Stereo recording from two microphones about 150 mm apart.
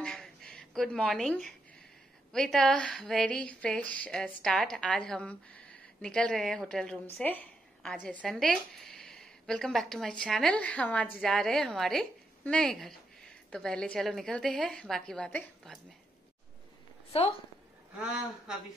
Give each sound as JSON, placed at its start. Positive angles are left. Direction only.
{"t": 0.0, "sound": "a sound", "side_deg": 5}
{"t": 2.3, "sound": "a woman's voice", "side_deg": 5}
{"t": 17.1, "sound": "a woman's voice", "side_deg": 40}
{"t": 17.9, "sound": "a woman's voice", "side_deg": -5}